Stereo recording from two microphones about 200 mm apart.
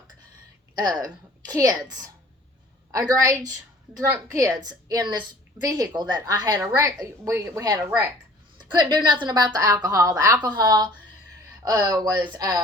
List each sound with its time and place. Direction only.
0.8 s a woman's voice: 20° right (ahead or behind)
3.1 s a woman's voice: 15° right (ahead or behind)